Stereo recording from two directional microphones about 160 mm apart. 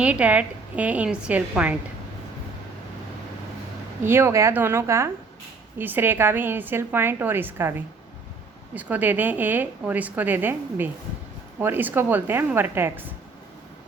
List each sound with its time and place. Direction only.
0.0 s a woman's voice: 10° right (ahead or behind)
4.0 s a woman's voice: 15° right (ahead or behind)